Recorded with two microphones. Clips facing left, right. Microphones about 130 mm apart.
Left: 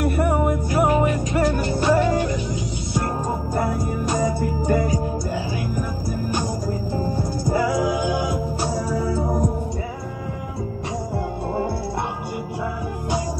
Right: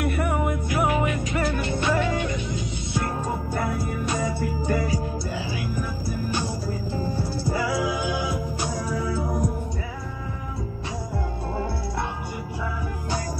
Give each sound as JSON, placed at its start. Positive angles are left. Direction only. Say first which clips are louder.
{"t": 0.0, "sound": "music", "louder": "left 5 dB", "side_deg": 40}
{"t": 7.0, "sound": "music", "louder": "left 3 dB", "side_deg": 45}
{"t": 8.9, "sound": "music", "louder": "left 4 dB", "side_deg": 30}